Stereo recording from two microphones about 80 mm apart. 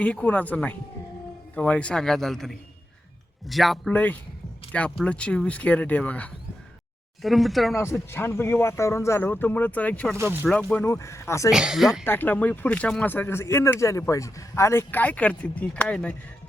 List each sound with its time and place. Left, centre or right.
0.0 s a man's voice: centre
3.8 s a man's voice: centre
7.2 s speech: centre
7.8 s speech: left
9.2 s speech: left
10.2 s speech: right
10.8 s speech: left
11.5 s speech: centre
12.0 s speech: left